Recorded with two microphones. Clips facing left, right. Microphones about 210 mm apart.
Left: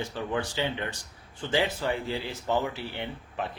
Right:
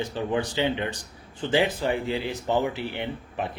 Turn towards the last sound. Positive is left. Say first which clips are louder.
# right 4 dB
turn(degrees=-15)  # may be behind; listen again after turning